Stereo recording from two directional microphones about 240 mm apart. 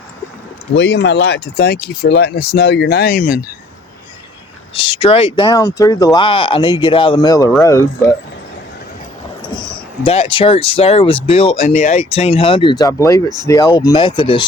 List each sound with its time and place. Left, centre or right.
0.8 s speech: left
4.7 s speech: left
10.0 s speech: left